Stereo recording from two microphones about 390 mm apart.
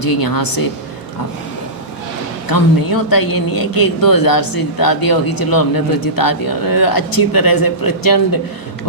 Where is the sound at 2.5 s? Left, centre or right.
Left.